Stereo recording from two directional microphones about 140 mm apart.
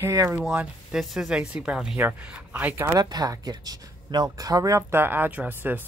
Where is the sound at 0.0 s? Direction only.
20° right (ahead or behind).